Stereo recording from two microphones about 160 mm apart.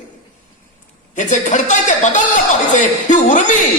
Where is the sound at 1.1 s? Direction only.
50° left (ahead or behind).